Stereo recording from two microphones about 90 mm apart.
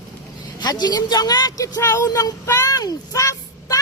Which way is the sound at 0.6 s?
50° left (ahead or behind).